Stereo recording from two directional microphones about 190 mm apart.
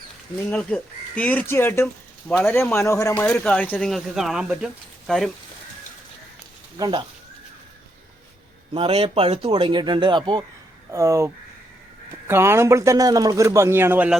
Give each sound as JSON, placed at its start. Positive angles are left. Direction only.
{"t": 0.5, "sound": "speech", "side_deg": 5}
{"t": 6.7, "sound": "speech", "side_deg": -25}
{"t": 8.7, "sound": "a man's voice", "side_deg": -30}
{"t": 12.3, "sound": "a man's voice", "side_deg": -15}